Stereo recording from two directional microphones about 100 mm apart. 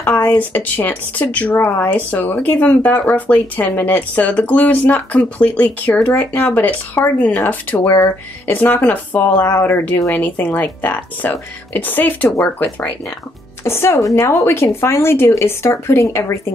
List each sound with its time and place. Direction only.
0.4 s speech: 20° left (ahead or behind)
13.7 s a woman's voice: 25° left (ahead or behind)